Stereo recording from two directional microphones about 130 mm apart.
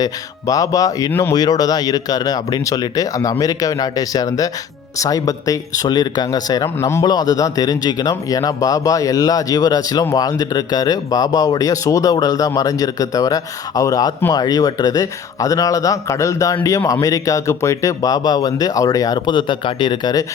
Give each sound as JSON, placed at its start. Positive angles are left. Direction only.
{"t": 0.0, "sound": "speech", "side_deg": 25}
{"t": 6.7, "sound": "speech", "side_deg": 20}
{"t": 7.0, "sound": "speech", "side_deg": 30}